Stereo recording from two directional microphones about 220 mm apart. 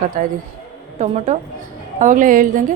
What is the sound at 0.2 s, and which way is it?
A woman's voice, 40° right (ahead or behind).